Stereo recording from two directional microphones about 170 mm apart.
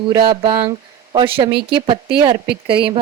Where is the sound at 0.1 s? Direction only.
30° right (ahead or behind).